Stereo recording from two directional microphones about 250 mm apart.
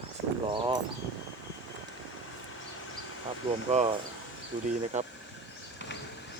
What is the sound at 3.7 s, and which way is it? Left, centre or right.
Speech, right.